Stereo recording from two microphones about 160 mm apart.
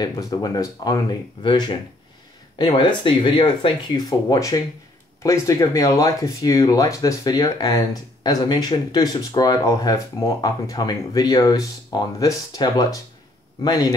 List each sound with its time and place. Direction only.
0.0 s speech: 25° left (ahead or behind)